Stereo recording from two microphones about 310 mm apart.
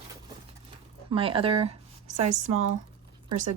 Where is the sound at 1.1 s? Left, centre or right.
Centre.